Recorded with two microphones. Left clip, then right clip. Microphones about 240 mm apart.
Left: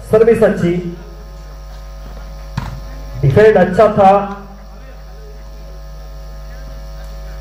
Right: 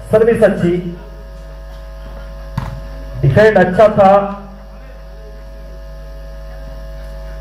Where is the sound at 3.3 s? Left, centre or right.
Left.